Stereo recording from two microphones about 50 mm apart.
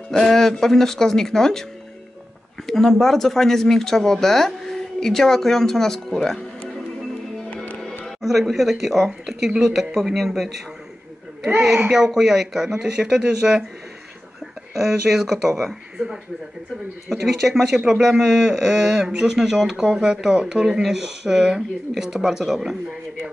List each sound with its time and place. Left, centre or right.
0.1 s speech: centre
8.2 s speech: centre
11.9 s speech: centre
14.7 s speech: centre